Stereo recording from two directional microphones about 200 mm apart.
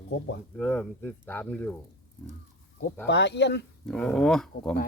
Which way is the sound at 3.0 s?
60° left (ahead or behind).